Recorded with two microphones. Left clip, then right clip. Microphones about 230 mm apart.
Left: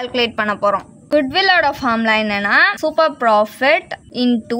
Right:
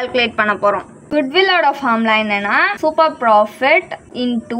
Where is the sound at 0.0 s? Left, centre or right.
Left.